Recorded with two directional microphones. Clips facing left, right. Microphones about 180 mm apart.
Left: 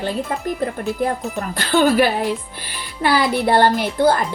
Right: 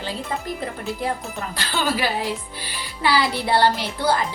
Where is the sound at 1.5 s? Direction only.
55° left (ahead or behind).